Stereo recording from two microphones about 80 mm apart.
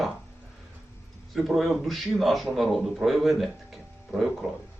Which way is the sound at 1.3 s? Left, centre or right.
Centre.